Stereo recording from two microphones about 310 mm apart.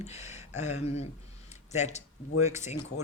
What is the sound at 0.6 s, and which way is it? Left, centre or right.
Speech, left.